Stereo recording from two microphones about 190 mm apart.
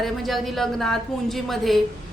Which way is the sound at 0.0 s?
Centre (ahead or behind).